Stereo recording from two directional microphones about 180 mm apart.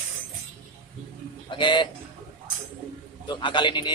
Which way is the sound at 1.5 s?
25° left (ahead or behind).